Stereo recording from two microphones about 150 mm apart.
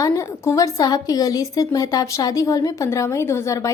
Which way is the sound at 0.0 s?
20° left (ahead or behind).